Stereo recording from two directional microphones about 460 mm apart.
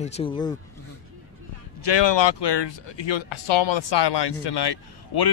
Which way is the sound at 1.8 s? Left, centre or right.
Left.